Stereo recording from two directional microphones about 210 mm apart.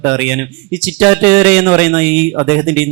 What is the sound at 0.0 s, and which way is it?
Speech, 10° right (ahead or behind).